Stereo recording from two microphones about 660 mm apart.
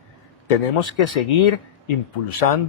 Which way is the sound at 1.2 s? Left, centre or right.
Left.